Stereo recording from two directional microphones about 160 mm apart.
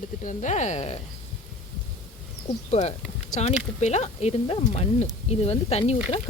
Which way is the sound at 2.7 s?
45° left (ahead or behind).